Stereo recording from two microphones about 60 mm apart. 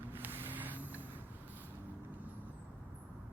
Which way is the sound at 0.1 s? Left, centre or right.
Right.